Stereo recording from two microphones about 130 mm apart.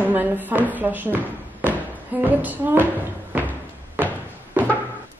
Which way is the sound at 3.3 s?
10° right (ahead or behind).